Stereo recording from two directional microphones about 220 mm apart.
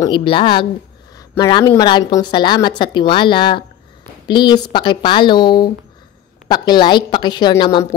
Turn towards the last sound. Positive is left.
turn(degrees=25)  # may be behind; listen again after turning